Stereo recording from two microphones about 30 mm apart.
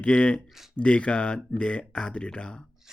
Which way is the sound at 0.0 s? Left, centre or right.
Left.